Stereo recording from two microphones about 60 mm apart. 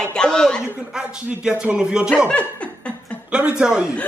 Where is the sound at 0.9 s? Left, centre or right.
Centre.